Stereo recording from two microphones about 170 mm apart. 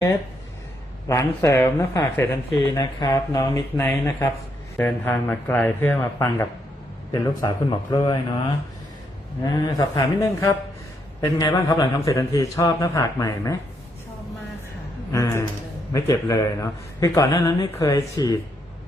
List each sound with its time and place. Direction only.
1.0 s a man's voice: 20° left (ahead or behind)
15.1 s a sound: 15° left (ahead or behind)
15.9 s a man's voice: 20° left (ahead or behind)